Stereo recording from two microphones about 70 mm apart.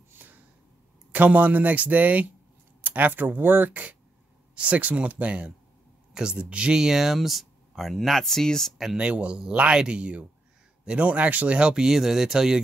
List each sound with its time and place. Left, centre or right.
0.2 s a sound: right
1.1 s speech: right; by 8.7 s centre
8.7 s speech: centre